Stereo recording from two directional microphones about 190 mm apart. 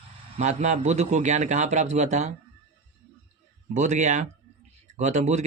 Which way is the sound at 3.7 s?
40° right (ahead or behind).